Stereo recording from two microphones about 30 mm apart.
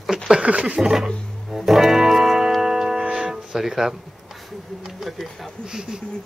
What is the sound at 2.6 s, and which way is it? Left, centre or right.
Tick-tock, centre.